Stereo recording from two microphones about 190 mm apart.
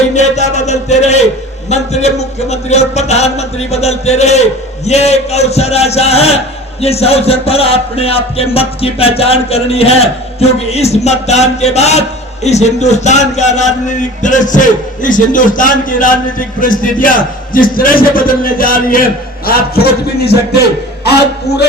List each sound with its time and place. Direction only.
0.1 s a man's voice: 35° left (ahead or behind); by 21.7 s 60° left (ahead or behind)